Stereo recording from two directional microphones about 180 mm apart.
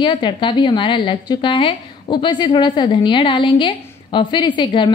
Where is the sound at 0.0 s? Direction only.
25° left (ahead or behind).